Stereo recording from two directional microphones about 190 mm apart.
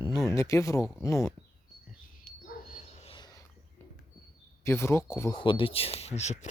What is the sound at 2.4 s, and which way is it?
Dog, 40° left (ahead or behind).